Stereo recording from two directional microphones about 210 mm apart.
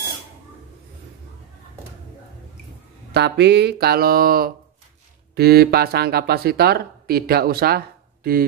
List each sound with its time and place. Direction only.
3.1 s speech: 55° right (ahead or behind)